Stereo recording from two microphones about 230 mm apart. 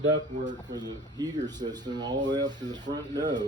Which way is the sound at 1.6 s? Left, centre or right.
Right.